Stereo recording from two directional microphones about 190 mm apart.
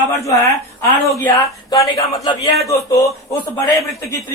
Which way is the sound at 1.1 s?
10° left (ahead or behind).